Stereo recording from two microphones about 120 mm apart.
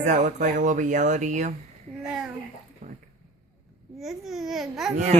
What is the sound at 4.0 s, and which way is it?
Speech, centre (ahead or behind).